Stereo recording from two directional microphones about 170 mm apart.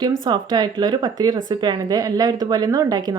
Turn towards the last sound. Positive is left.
turn(degrees=-25)  # may be behind; listen again after turning